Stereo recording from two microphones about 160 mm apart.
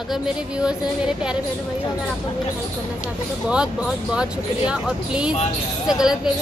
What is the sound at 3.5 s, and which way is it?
A woman's voice, 5° right (ahead or behind).